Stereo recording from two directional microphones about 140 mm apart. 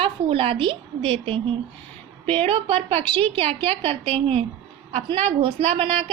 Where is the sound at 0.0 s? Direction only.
40° right (ahead or behind).